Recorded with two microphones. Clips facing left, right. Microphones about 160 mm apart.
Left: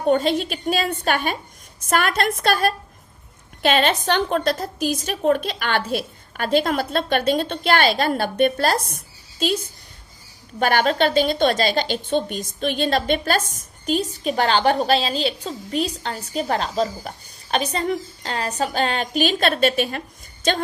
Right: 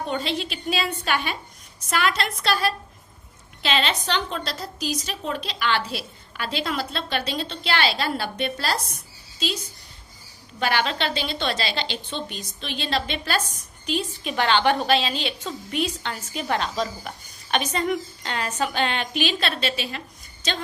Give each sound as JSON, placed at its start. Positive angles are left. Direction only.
{"t": 0.0, "sound": "a woman's voice", "side_deg": 45}
{"t": 10.6, "sound": "a woman's voice", "side_deg": 45}